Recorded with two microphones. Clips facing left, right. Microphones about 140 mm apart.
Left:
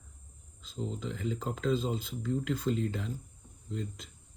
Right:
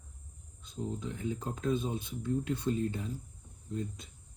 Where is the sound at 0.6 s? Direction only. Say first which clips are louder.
Even; 90° left.